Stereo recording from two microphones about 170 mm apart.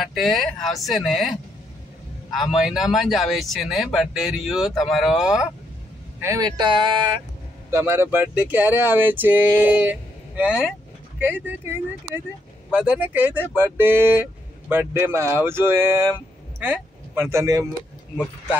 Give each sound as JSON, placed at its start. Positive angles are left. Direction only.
{"t": 0.0, "sound": "speech", "side_deg": 0}
{"t": 6.2, "sound": "speech", "side_deg": -20}
{"t": 7.7, "sound": "speech", "side_deg": -15}